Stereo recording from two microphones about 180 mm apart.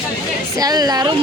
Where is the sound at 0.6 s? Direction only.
20° right (ahead or behind).